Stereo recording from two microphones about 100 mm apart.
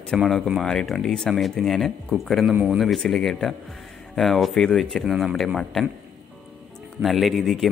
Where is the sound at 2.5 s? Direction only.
15° right (ahead or behind).